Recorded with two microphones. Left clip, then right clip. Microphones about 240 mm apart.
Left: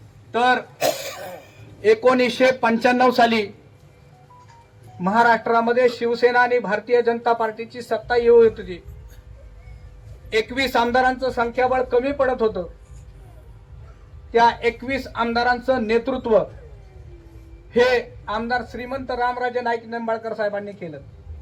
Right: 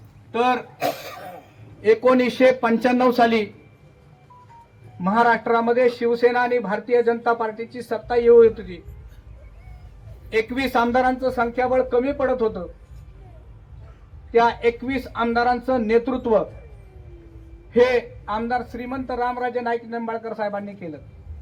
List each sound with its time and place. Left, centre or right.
0.3 s speech: left
1.8 s a man's voice: left
5.0 s a man's voice: left
10.2 s a man's voice: left
14.3 s a man's voice: left
17.7 s a man's voice: left